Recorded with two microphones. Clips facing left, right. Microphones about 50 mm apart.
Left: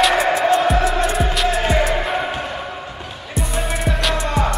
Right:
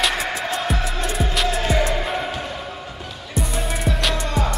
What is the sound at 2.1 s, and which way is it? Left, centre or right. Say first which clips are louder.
Music: left 3 dB; centre.